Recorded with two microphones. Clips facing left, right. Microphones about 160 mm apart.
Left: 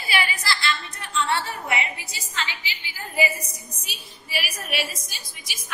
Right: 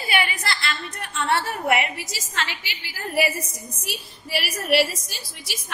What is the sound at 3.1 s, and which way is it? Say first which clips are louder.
Speech: right 2 dB; 80° right.